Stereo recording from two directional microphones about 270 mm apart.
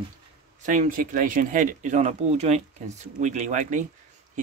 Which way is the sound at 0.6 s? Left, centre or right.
Right.